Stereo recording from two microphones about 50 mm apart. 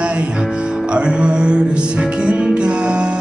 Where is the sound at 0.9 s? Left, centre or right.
Centre.